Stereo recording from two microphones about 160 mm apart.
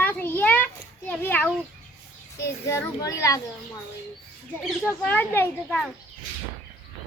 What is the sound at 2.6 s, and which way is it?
Speech, 20° left (ahead or behind).